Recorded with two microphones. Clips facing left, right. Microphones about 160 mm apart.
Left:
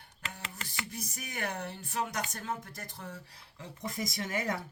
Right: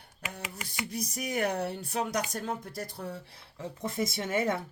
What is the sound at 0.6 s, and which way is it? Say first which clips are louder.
Music: right 2 dB; 15° right (ahead or behind).